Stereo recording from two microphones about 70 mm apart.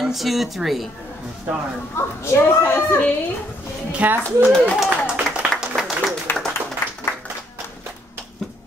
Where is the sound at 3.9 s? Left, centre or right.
Right.